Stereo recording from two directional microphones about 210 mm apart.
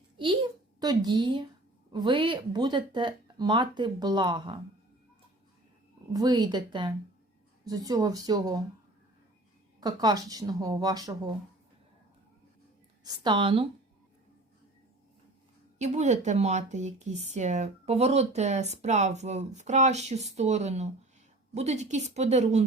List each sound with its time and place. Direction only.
0.2 s a child's voice: 25° right (ahead or behind)
6.1 s speech: 20° right (ahead or behind)
9.8 s speech: 20° right (ahead or behind)
13.1 s speech: 20° right (ahead or behind)
15.8 s speech: 35° right (ahead or behind)